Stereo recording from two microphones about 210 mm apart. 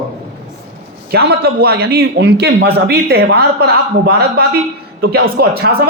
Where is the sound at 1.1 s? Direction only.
50° right (ahead or behind).